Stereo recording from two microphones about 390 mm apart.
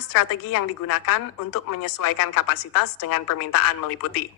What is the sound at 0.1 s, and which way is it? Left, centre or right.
A woman's voice, left.